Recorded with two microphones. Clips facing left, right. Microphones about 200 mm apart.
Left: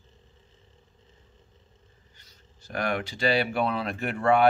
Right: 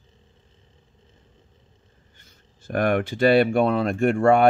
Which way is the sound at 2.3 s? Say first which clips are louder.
Right 10 dB; 50° right (ahead or behind).